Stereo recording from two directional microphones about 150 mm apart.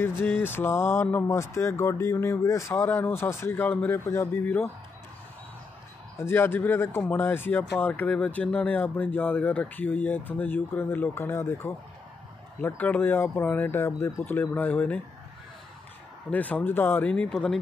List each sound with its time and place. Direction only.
0.0 s speech: 15° left (ahead or behind)
6.1 s speech: 15° left (ahead or behind)
16.3 s speech: 10° left (ahead or behind)